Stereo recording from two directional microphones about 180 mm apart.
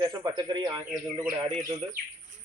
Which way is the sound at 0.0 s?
25° right (ahead or behind).